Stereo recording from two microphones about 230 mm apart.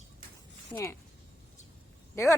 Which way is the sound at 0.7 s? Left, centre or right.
Centre.